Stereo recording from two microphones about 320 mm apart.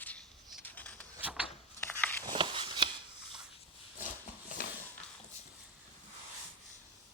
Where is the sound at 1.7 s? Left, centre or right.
Centre.